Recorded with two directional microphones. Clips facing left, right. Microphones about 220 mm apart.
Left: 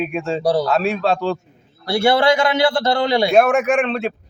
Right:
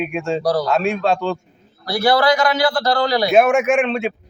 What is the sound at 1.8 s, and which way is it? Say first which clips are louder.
A man's voice: left 1 dB; 25° left (ahead or behind).